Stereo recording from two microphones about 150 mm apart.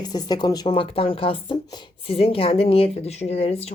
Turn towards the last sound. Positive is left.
turn(degrees=45)  # may be behind; listen again after turning